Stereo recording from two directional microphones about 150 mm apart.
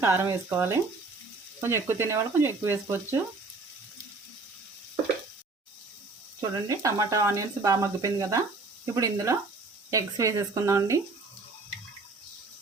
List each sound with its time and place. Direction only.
0.0 s sizzle: 15° right (ahead or behind)
6.7 s speech: 20° right (ahead or behind)